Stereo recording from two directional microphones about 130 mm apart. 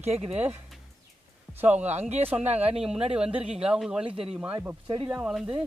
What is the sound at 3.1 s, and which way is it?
Speech, 5° right (ahead or behind).